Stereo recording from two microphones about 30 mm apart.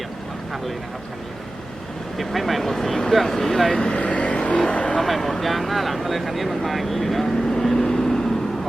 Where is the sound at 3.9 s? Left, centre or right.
Left.